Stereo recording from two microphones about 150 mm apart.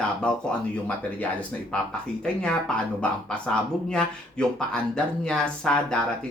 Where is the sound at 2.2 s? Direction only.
5° left (ahead or behind).